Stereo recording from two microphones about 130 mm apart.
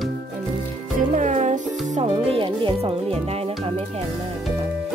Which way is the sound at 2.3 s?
45° right (ahead or behind).